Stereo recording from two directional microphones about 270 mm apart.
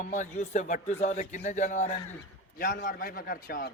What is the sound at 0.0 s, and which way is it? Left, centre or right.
A man's voice, left.